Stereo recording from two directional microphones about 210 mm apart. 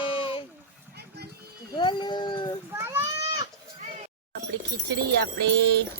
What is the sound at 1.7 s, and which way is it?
Speech, 20° left (ahead or behind).